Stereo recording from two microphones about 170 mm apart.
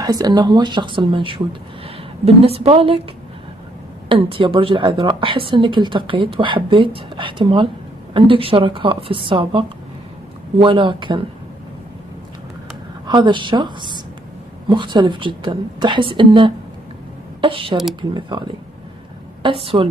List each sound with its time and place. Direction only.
0.0 s a woman's voice: 20° right (ahead or behind)
4.1 s a woman's voice: 30° right (ahead or behind)
13.0 s speech: 25° right (ahead or behind)
19.6 s a woman's voice: 35° right (ahead or behind)